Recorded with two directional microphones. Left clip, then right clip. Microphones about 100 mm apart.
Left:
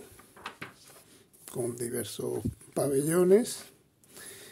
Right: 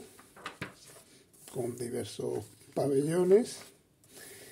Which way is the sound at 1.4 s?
40° left (ahead or behind).